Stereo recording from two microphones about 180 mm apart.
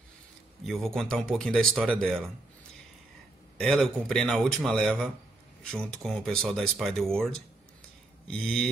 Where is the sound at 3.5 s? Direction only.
5° left (ahead or behind).